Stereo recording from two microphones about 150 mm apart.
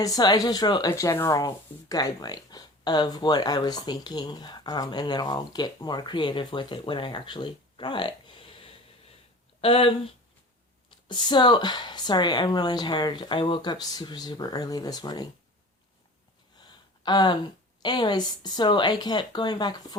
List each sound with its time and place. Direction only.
0.0 s speech: 25° left (ahead or behind)
11.1 s speech: 30° left (ahead or behind)
17.0 s speech: 30° left (ahead or behind)